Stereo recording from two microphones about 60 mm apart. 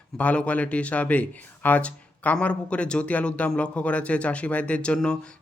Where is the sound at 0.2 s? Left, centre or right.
Left.